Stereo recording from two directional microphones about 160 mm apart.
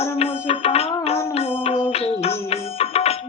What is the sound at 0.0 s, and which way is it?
Music, 40° left (ahead or behind).